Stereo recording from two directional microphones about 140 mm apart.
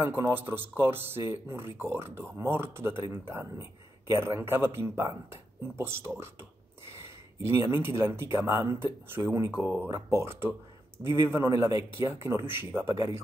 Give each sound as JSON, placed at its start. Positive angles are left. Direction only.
{"t": 0.0, "sound": "speech", "side_deg": -15}
{"t": 7.4, "sound": "speech", "side_deg": -20}